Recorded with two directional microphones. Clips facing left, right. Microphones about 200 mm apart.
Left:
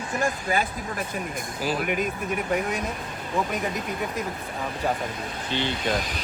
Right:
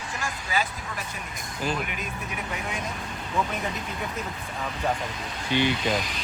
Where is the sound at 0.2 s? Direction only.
55° left (ahead or behind).